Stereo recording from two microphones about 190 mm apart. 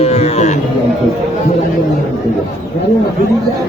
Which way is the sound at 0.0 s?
35° left (ahead or behind).